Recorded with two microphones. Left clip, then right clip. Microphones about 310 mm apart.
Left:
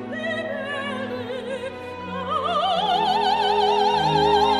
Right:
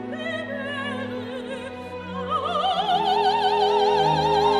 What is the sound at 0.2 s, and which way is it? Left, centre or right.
Music, left.